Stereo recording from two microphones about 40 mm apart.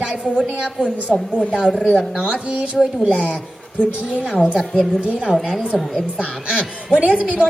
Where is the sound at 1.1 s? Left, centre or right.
Centre.